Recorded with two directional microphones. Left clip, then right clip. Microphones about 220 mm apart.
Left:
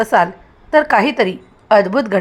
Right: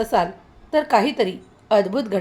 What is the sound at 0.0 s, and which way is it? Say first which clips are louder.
A woman's voice: left 7 dB; 20° left (ahead or behind).